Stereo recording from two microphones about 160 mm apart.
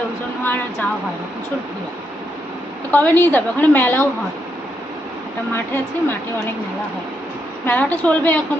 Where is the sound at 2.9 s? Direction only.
10° left (ahead or behind).